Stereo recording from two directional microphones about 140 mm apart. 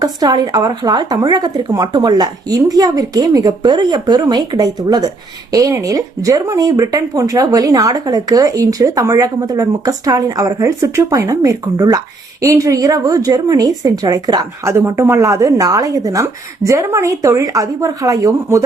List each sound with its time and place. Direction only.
0.0 s speech: 30° right (ahead or behind)